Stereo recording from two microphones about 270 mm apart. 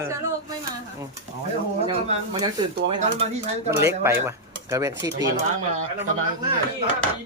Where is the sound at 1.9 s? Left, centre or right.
Centre.